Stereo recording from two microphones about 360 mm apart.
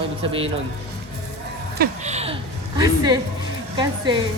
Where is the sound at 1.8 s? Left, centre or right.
Centre.